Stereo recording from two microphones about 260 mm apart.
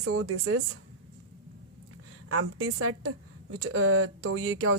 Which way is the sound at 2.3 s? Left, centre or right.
Right.